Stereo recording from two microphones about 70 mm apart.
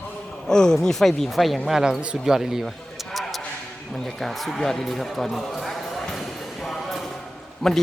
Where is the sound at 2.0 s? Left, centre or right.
Centre.